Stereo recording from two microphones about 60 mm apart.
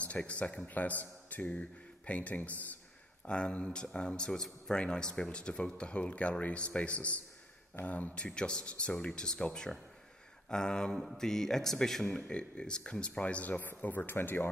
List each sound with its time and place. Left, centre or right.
0.0 s a man's voice: left